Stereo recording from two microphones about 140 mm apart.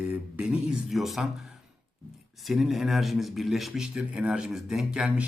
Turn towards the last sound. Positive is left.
turn(degrees=-5)  # may be behind; listen again after turning